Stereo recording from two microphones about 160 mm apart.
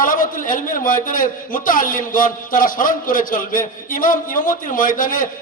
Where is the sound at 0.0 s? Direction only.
60° left (ahead or behind).